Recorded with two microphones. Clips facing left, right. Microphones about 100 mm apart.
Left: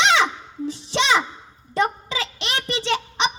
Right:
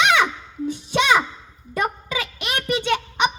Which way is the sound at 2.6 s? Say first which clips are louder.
Right 3 dB; 30° left (ahead or behind).